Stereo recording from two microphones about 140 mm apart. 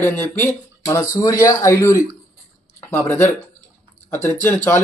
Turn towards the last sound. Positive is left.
turn(degrees=15)  # may be behind; listen again after turning